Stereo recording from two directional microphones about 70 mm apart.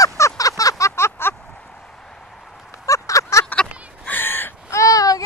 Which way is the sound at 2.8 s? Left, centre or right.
Left.